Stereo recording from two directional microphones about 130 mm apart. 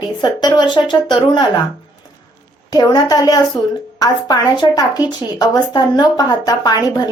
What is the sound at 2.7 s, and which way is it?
A woman's voice, 30° left (ahead or behind).